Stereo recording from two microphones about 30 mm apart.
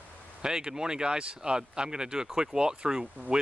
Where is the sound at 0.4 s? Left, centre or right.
Right.